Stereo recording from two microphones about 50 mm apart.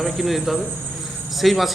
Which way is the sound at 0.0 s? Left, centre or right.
Centre.